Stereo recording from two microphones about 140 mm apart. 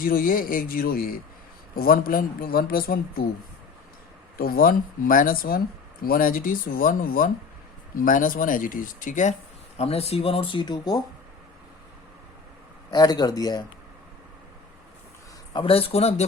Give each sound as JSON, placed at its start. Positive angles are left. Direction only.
{"t": 0.0, "sound": "speech", "side_deg": 90}
{"t": 4.4, "sound": "speech", "side_deg": 90}
{"t": 9.7, "sound": "speech", "side_deg": 45}
{"t": 12.9, "sound": "speech", "side_deg": 30}
{"t": 15.5, "sound": "speech", "side_deg": 40}